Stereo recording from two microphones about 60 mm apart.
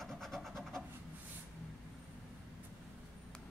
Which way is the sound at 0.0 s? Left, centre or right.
Centre.